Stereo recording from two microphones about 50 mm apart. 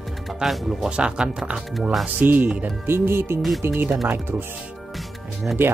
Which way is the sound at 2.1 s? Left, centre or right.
Right.